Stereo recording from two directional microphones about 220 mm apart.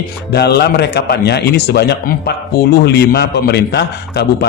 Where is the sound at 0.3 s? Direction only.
45° left (ahead or behind).